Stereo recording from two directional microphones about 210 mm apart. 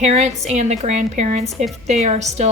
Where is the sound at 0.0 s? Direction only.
30° right (ahead or behind).